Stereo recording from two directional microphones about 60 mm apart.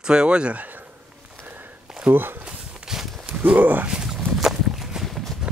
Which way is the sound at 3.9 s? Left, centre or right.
Centre.